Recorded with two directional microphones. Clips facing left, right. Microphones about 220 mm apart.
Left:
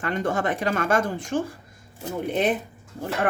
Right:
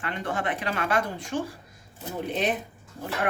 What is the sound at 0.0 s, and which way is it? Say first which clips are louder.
Speech: left 5 dB; 45° left (ahead or behind).